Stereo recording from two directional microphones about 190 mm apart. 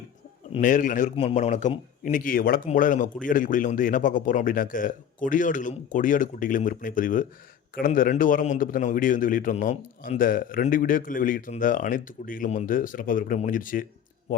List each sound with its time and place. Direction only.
0.6 s a man's voice: 45° left (ahead or behind)